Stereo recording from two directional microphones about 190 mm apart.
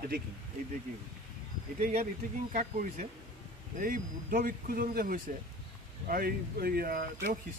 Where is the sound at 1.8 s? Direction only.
35° right (ahead or behind).